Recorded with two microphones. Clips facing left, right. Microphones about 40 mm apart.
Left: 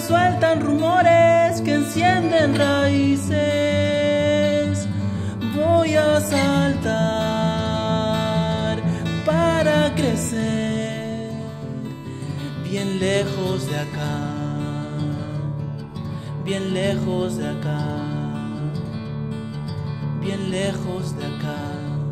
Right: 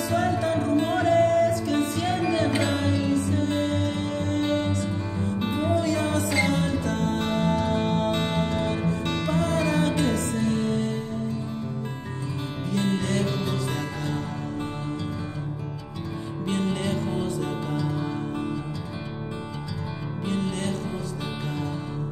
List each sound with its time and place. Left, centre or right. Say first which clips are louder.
0.1 s speech: left 8 dB; left
2.6 s music: left 7 dB; left
4.7 s music: left 2 dB; right
5.6 s music: left 9 dB; left
12.7 s music: left 4 dB; left
16.4 s music: left 5 dB; left
17.1 s speech: left 4 dB; left
20.2 s music: left 3 dB; left